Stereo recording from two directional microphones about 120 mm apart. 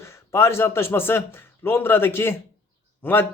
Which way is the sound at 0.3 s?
20° left (ahead or behind).